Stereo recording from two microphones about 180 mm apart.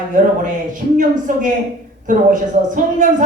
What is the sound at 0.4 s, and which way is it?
A woman's voice, 45° right (ahead or behind).